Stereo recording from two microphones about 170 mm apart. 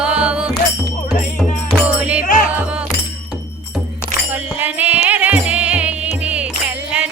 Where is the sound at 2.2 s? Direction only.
50° left (ahead or behind).